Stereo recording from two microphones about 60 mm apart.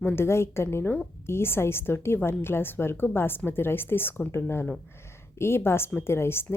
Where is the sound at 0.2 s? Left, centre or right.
Left.